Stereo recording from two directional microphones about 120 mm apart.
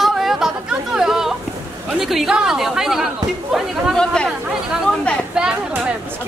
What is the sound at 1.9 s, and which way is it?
Speech, 5° right (ahead or behind).